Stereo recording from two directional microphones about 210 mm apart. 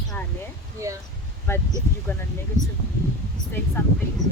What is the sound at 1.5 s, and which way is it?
Speech, 10° left (ahead or behind).